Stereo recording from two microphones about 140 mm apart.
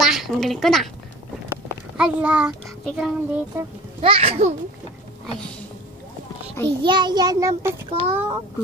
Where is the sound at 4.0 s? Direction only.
45° right (ahead or behind).